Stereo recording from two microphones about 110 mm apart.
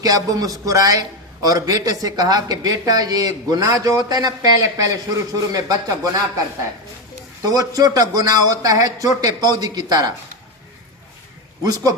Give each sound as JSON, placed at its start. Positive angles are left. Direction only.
{"t": 0.0, "sound": "a man's voice", "side_deg": -35}
{"t": 7.4, "sound": "a man's voice", "side_deg": -35}
{"t": 11.6, "sound": "a man's voice", "side_deg": -35}